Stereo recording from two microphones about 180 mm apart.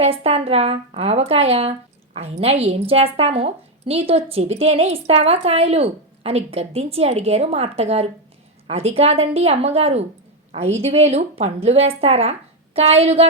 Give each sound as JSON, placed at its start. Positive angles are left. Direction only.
{"t": 0.0, "sound": "a woman's voice", "side_deg": -35}